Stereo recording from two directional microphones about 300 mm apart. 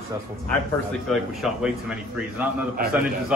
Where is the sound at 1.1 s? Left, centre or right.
Centre.